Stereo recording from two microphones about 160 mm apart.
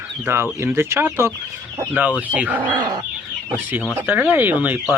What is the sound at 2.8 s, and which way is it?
Chicken, 30° right (ahead or behind).